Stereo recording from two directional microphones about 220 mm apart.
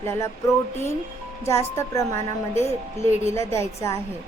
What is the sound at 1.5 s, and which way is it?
Speech, 10° left (ahead or behind).